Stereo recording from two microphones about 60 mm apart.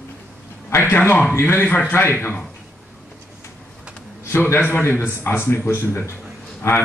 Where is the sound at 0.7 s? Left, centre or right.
Left.